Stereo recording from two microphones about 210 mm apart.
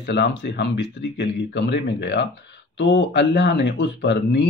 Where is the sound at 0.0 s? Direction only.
55° left (ahead or behind).